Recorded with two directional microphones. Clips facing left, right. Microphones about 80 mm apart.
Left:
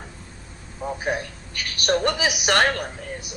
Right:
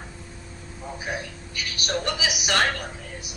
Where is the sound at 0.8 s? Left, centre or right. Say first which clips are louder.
Left 8 dB; left.